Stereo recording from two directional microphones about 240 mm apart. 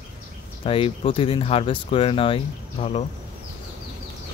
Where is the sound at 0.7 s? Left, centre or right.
Left.